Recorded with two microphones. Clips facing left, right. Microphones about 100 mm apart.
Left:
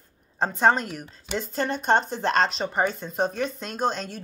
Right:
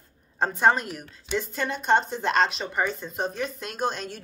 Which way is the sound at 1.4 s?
35° left (ahead or behind).